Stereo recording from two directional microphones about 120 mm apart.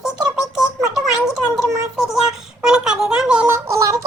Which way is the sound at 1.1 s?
5° right (ahead or behind).